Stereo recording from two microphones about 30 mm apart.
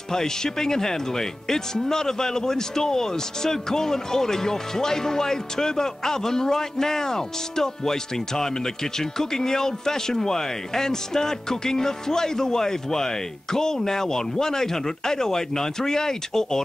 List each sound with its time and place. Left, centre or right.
0.1 s speech: centre